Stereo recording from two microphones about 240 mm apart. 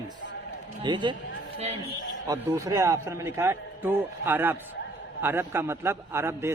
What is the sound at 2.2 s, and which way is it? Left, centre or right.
A man's voice, centre.